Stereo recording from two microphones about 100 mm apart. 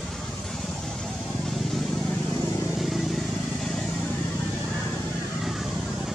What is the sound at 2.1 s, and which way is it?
Vehicle, 15° left (ahead or behind).